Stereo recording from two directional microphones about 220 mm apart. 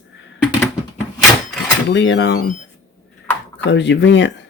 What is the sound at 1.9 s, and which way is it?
Speech, 55° left (ahead or behind).